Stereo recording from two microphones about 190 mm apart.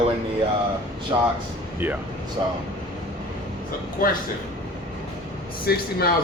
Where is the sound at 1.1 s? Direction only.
20° right (ahead or behind).